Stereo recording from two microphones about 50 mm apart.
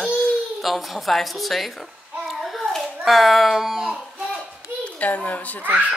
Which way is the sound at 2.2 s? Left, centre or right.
Centre.